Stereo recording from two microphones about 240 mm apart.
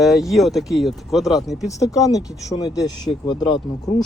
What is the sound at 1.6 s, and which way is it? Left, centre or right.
Speech, centre.